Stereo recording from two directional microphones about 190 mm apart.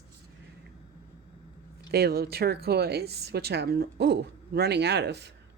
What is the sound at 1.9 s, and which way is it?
A woman's voice, 55° right (ahead or behind).